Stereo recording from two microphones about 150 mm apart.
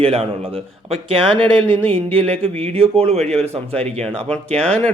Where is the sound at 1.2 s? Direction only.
35° right (ahead or behind).